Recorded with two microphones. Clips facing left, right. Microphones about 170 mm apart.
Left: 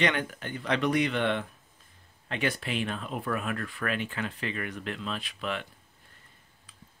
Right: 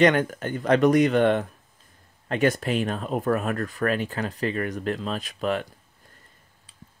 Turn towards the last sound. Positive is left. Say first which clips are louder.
# right 8 dB
turn(degrees=-40)  # may be behind; listen again after turning